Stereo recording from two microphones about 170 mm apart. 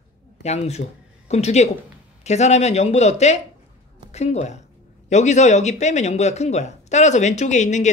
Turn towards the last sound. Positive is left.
turn(degrees=45)  # may be behind; listen again after turning